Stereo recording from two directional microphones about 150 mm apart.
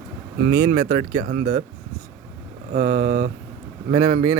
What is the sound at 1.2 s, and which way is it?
Speech, 80° right.